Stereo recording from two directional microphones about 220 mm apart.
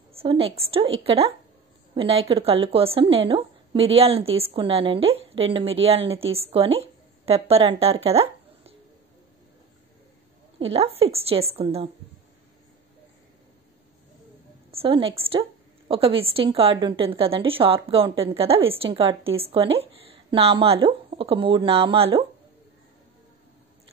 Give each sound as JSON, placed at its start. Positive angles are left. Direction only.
{"t": 0.1, "sound": "a woman's voice", "side_deg": -25}
{"t": 10.6, "sound": "a woman's voice", "side_deg": -25}
{"t": 14.7, "sound": "a woman's voice", "side_deg": -25}